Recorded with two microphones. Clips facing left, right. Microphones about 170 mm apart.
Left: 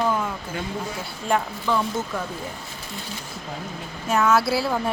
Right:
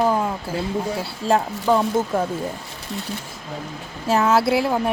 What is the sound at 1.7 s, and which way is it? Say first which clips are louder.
Speech: right 6 dB; 45° right (ahead or behind).